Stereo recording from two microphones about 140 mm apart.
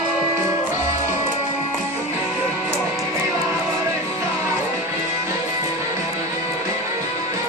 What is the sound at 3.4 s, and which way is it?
Music, 20° right (ahead or behind).